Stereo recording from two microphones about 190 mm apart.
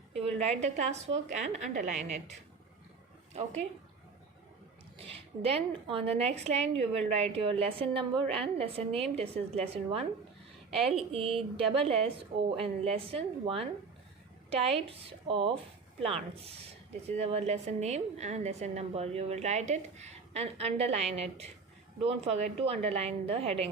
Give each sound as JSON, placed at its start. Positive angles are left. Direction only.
{"t": 0.1, "sound": "a woman's voice", "side_deg": -35}
{"t": 3.3, "sound": "a woman's voice", "side_deg": -35}
{"t": 4.9, "sound": "a woman's voice", "side_deg": -30}